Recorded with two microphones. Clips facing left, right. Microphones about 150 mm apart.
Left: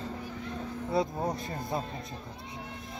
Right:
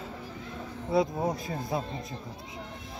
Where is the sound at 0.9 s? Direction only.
Centre (ahead or behind).